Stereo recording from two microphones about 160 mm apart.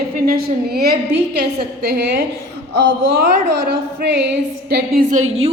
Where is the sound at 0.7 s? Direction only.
75° right (ahead or behind).